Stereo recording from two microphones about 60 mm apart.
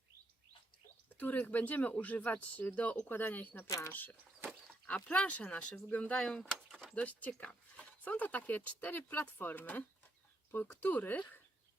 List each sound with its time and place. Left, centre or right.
1.1 s speech: left
3.7 s speech: left
4.9 s speech: centre
6.7 s a sound: centre
7.0 s speech: left